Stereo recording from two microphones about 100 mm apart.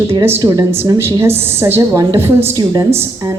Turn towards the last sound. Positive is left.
turn(degrees=-25)  # may be behind; listen again after turning